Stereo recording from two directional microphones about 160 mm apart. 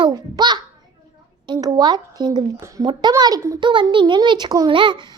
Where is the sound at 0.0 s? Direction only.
25° right (ahead or behind).